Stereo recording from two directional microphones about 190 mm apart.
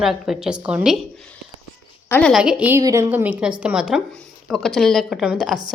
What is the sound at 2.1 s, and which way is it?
A woman's voice, 5° left (ahead or behind).